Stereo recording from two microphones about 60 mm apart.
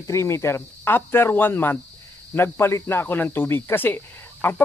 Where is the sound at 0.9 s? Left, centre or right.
Left.